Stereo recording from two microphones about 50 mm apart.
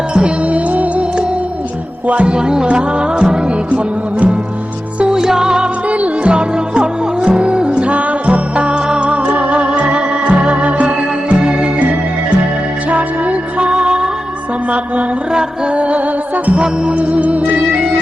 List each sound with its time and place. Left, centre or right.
0.1 s music: centre
2.0 s music: right
4.9 s music: centre
5.9 s music: right
12.9 s music: right
15.3 s music: centre
15.7 s music: right